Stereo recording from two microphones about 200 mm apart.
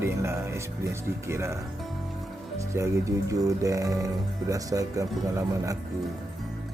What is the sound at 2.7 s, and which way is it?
Speech, 15° right (ahead or behind).